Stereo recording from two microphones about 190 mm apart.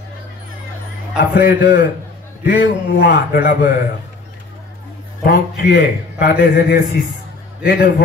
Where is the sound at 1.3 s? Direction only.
60° left (ahead or behind).